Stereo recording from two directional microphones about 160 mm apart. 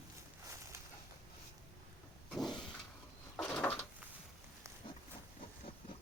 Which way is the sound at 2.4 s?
30° left (ahead or behind).